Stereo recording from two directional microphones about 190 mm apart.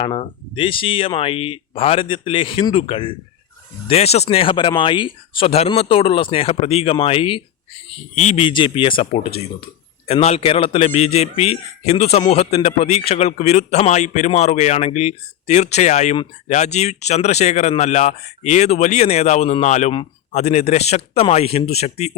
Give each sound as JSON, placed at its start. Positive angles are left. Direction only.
{"t": 0.0, "sound": "a man's voice", "side_deg": 30}